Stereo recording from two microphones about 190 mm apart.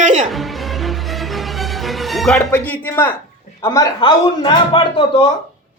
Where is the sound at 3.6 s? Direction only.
15° left (ahead or behind).